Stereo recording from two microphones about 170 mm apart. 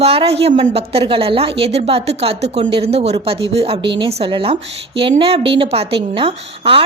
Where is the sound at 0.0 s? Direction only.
35° right (ahead or behind).